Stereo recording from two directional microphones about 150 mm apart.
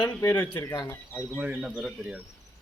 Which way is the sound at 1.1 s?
10° right (ahead or behind).